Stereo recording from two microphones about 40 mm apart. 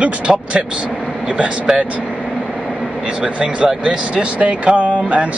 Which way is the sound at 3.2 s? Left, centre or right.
Right.